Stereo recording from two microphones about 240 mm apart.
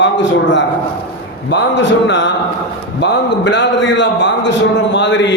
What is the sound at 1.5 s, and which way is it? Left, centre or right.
A man's voice, left.